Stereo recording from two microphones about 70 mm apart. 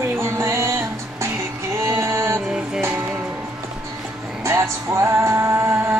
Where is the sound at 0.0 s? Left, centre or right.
Right.